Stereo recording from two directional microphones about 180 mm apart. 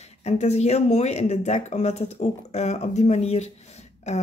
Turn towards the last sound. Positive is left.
turn(degrees=40)  # may be behind; listen again after turning